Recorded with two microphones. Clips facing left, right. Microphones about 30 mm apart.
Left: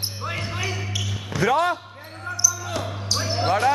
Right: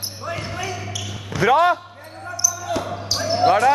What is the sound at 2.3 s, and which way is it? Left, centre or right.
Basketball bounce, centre.